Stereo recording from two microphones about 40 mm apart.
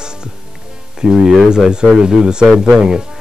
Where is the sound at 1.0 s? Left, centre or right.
Centre.